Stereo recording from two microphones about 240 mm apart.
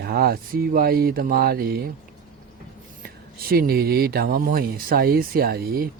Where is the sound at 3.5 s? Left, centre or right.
Right.